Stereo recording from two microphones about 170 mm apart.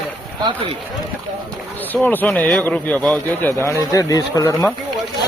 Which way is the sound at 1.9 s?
10° left (ahead or behind).